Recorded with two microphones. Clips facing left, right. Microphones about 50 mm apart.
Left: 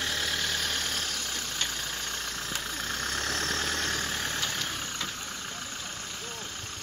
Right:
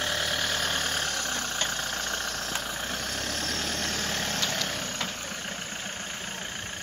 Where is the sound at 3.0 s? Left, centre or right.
Left.